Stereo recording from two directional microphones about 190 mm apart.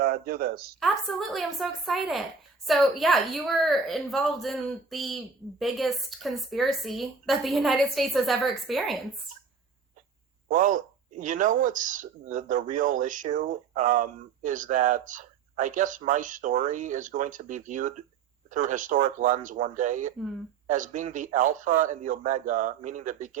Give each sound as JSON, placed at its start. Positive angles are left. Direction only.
{"t": 0.0, "sound": "speech", "side_deg": -55}
{"t": 0.8, "sound": "a woman's voice", "side_deg": 0}
{"t": 10.5, "sound": "speech", "side_deg": -45}